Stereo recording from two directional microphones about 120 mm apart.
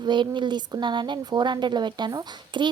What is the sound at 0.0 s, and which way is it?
Speech, 40° right (ahead or behind).